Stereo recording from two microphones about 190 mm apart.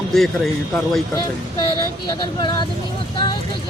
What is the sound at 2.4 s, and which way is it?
Speech, 25° left (ahead or behind).